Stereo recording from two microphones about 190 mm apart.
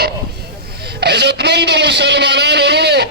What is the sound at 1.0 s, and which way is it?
Speech, 60° right (ahead or behind).